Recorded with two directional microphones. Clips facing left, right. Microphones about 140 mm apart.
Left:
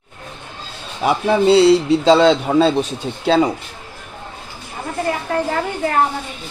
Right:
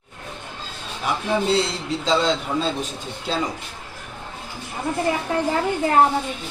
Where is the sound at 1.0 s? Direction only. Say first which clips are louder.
Left 8 dB; 75° left (ahead or behind).